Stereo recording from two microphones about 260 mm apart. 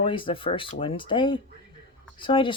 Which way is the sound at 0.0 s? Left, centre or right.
Centre.